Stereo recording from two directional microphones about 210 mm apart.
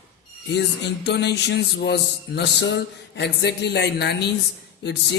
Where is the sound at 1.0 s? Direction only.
55° left (ahead or behind).